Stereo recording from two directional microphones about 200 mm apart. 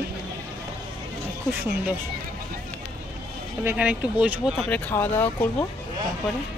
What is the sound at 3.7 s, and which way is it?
Speech, 5° right (ahead or behind).